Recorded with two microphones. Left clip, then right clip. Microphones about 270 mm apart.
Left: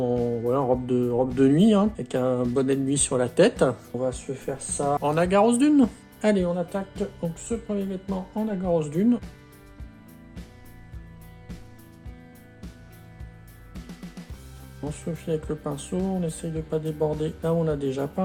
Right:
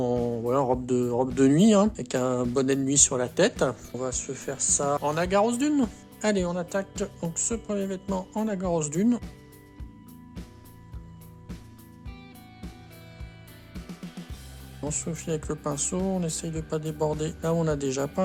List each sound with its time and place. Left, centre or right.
0.3 s music: right
1.4 s speech: right
3.9 s speech: right
5.0 s speech: centre
13.7 s music: centre
14.8 s speech: right